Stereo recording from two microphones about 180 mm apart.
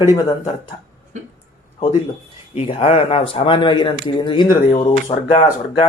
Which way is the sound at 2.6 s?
35° left (ahead or behind).